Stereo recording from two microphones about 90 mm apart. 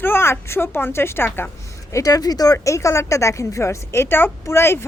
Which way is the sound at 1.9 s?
40° left (ahead or behind).